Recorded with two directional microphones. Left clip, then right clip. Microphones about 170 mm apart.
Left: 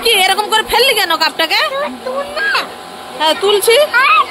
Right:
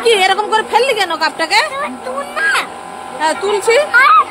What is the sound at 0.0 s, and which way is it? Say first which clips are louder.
A woman's voice: even; 10° right (ahead or behind).